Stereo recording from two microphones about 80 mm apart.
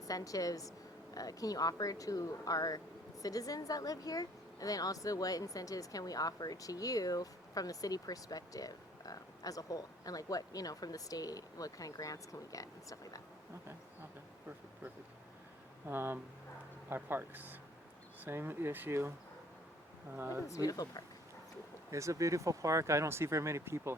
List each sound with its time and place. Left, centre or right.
0.0 s speech: left
15.9 s speech: right
20.1 s speech: right
20.5 s speech: left
21.8 s speech: right